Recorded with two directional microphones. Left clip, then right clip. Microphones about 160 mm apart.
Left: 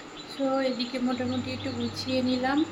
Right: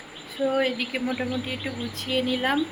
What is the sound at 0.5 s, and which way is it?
Speech, centre (ahead or behind).